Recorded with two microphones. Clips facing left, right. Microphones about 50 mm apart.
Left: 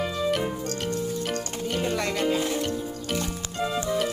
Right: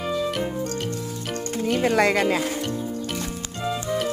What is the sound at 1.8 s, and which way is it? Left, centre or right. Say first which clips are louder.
Speech: right 7 dB; right.